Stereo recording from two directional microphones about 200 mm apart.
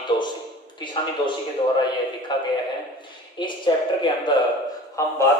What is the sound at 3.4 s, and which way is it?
A man's voice, 25° left (ahead or behind).